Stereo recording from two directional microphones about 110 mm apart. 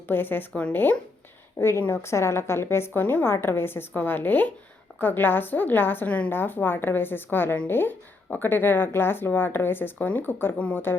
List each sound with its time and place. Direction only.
0.1 s a woman's voice: 20° left (ahead or behind)